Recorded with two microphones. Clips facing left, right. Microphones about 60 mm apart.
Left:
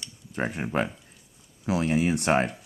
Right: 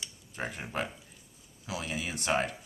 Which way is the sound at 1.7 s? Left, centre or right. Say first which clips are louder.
Left 12 dB; left.